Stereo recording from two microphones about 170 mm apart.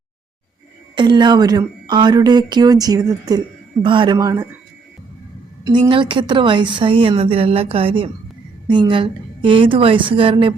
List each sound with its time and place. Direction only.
0.9 s a woman's voice: 25° right (ahead or behind)
5.6 s a woman's voice: 25° right (ahead or behind)